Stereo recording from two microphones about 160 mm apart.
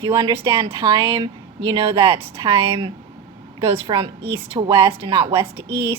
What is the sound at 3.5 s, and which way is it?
A woman's voice, 30° right (ahead or behind).